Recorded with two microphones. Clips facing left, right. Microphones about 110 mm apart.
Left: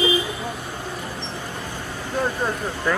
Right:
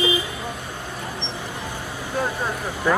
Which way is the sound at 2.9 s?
10° right (ahead or behind).